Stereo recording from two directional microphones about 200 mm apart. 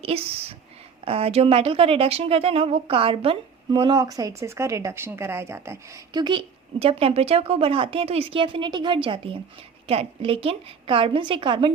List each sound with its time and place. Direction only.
0.0 s a woman's voice: 30° right (ahead or behind)